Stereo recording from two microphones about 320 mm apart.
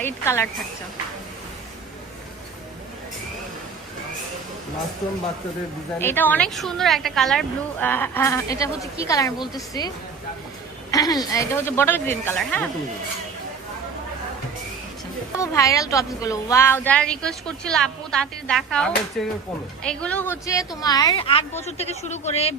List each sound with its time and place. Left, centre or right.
0.0 s a woman's voice: centre
6.0 s a woman's voice: centre
10.9 s speech: centre
15.4 s a woman's voice: centre